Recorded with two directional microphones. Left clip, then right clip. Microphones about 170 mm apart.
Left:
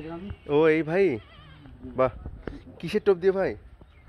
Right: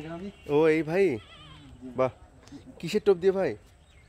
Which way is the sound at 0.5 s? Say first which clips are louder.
Left 2 dB; 10° right (ahead or behind).